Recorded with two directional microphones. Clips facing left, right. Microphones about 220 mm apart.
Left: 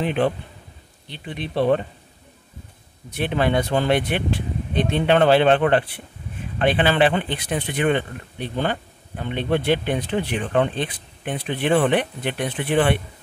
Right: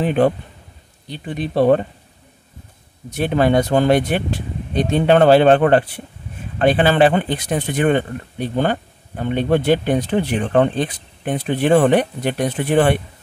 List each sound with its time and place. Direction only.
0.0 s speech: 45° right (ahead or behind)
3.2 s speech: 40° right (ahead or behind)